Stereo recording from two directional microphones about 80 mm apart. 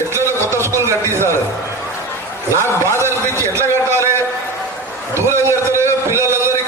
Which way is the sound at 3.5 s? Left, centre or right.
Right.